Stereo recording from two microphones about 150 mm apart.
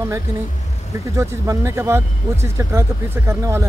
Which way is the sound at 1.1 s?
20° right (ahead or behind).